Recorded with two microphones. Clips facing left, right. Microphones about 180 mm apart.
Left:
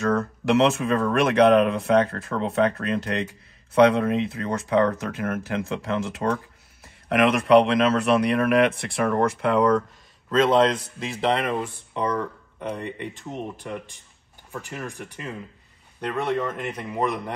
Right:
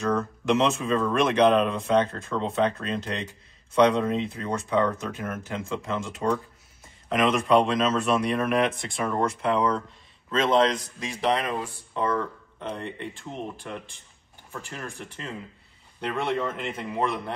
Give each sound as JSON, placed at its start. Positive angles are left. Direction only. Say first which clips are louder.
{"t": 0.6, "sound": "speech", "louder": "left 5 dB", "side_deg": 65}
{"t": 10.3, "sound": "a man's voice", "louder": "left 3 dB", "side_deg": 35}
{"t": 10.7, "sound": "speech", "louder": "left 2 dB", "side_deg": 0}
{"t": 11.7, "sound": "speech", "louder": "left 1 dB", "side_deg": 15}
{"t": 16.1, "sound": "speech", "louder": "left 2 dB", "side_deg": 0}